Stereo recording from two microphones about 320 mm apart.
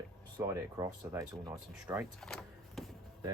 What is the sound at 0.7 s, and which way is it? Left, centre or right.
Speech, centre.